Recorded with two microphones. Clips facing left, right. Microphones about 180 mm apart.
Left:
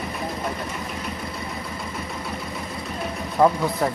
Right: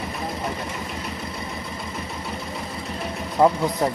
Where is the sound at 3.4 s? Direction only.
25° right (ahead or behind).